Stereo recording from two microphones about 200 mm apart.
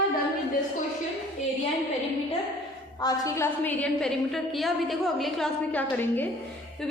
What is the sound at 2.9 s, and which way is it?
A woman's voice, 20° left (ahead or behind).